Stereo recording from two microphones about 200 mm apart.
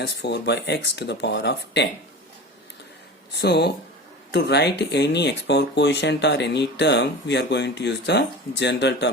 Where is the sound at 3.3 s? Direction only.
55° left (ahead or behind).